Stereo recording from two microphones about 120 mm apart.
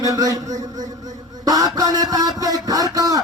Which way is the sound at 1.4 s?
30° right (ahead or behind).